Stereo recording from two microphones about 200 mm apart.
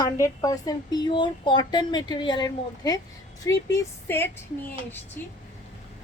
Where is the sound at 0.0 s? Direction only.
20° left (ahead or behind).